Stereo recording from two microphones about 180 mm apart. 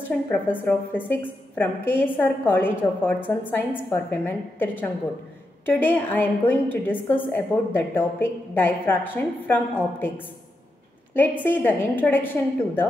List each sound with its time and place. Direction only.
0.3 s a woman's voice: 10° left (ahead or behind)
11.4 s a woman's voice: 10° left (ahead or behind)